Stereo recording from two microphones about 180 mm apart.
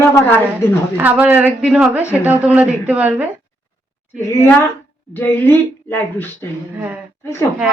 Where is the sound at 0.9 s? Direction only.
10° right (ahead or behind).